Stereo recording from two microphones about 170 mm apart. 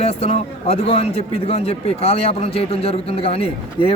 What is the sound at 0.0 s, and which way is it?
A man's voice, 35° left (ahead or behind).